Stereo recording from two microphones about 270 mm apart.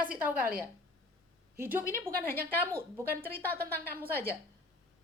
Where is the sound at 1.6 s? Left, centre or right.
Centre.